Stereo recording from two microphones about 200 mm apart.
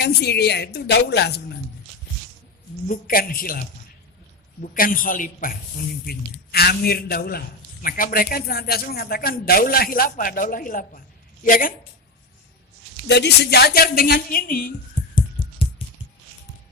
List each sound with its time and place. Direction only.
0.0 s a woman's voice: 55° left (ahead or behind)
2.8 s a man's voice: 45° left (ahead or behind)
13.1 s a man's voice: 60° left (ahead or behind)